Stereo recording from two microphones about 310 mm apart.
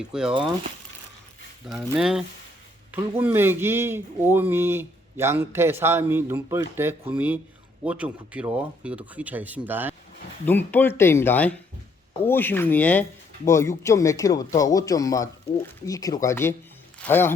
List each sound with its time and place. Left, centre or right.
0.0 s speech: centre
0.3 s speech: centre
1.8 s speech: centre
10.4 s speech: centre